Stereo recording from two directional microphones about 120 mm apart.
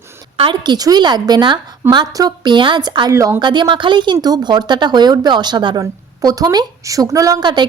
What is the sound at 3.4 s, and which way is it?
A woman's voice, 40° right (ahead or behind).